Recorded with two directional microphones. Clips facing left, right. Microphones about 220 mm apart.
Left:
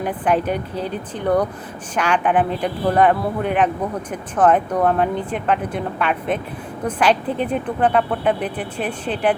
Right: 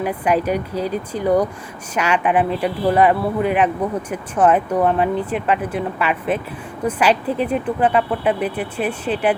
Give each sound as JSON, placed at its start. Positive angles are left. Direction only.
{"t": 0.0, "sound": "speech", "side_deg": -5}
{"t": 0.7, "sound": "speech", "side_deg": -35}
{"t": 1.1, "sound": "speech", "side_deg": -10}